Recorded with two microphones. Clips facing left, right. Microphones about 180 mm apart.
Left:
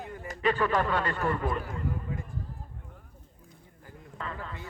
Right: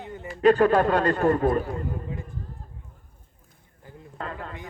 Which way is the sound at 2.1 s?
25° right (ahead or behind).